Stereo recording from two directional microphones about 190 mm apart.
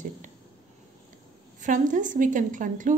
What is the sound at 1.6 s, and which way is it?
Speech, 40° right (ahead or behind).